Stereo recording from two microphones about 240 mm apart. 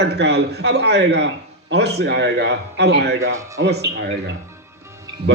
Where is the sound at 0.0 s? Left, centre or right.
Right.